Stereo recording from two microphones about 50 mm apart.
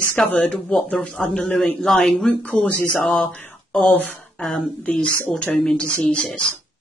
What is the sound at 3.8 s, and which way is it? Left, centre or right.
Speech, left.